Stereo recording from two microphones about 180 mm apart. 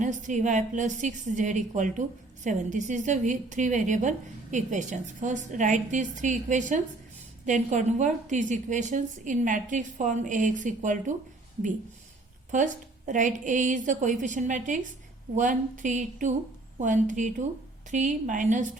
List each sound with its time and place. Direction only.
0.0 s a woman's voice: 45° right (ahead or behind)
12.5 s a woman's voice: 45° right (ahead or behind)